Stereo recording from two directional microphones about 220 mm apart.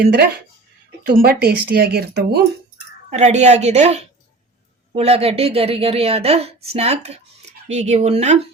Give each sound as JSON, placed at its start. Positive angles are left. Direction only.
{"t": 0.0, "sound": "speech", "side_deg": -45}
{"t": 3.1, "sound": "a woman's voice", "side_deg": -30}